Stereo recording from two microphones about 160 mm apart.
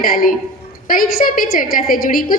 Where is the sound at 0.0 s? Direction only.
65° left (ahead or behind).